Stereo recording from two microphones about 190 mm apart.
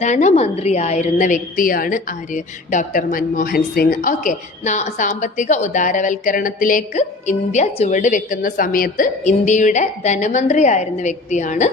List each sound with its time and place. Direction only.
0.0 s a woman's voice: 40° left (ahead or behind)